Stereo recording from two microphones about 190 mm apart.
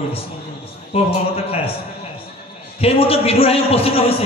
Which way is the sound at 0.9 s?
30° left (ahead or behind).